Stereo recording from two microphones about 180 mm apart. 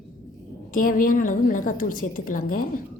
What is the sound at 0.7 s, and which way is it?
A woman's voice, 50° left (ahead or behind).